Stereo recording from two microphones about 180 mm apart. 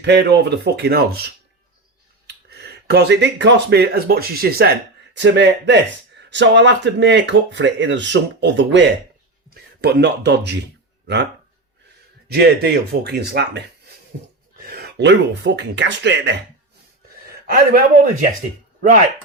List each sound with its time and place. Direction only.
0.0 s speech: 70° right (ahead or behind)
5.1 s speech: 80° right
9.8 s speech: 70° right (ahead or behind)
12.3 s speech: 65° right (ahead or behind)
14.6 s speech: 60° right (ahead or behind); by 16.3 s 80° right
17.2 s a man's voice: 55° right (ahead or behind)